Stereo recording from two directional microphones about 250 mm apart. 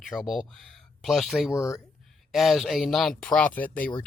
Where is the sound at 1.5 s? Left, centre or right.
Centre.